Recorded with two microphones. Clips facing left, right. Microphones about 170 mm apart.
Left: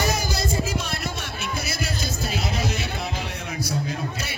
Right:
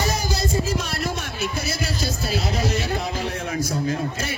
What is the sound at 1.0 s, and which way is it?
Music, 40° right (ahead or behind).